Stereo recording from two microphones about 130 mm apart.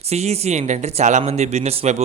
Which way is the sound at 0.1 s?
55° right (ahead or behind).